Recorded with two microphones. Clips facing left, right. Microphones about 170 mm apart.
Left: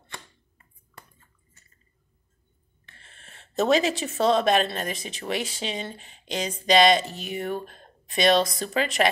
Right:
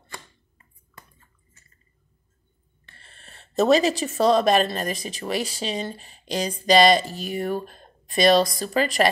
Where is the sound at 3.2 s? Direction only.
40° right (ahead or behind).